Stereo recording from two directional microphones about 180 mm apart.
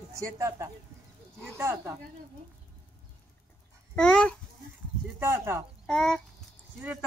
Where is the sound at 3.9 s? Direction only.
5° left (ahead or behind).